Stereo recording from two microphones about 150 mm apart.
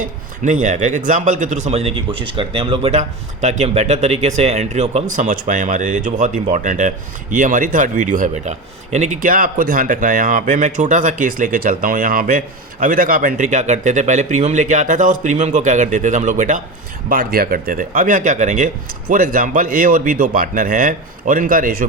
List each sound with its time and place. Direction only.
0.0 s speech: 55° right (ahead or behind)
17.1 s speech: 75° right (ahead or behind)